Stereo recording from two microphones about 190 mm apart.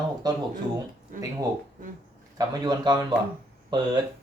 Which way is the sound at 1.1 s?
45° right (ahead or behind).